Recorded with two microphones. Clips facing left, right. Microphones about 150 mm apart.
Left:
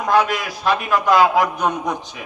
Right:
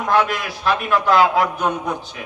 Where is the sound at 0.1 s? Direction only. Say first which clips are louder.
Left 1 dB; 15° left (ahead or behind).